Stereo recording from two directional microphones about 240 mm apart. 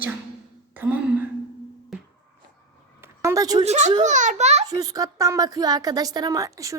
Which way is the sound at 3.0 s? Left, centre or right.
Centre.